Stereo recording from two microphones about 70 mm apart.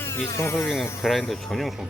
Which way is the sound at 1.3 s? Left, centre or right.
Centre.